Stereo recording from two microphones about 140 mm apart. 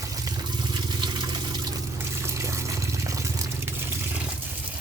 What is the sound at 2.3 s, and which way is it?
Water, 20° right (ahead or behind).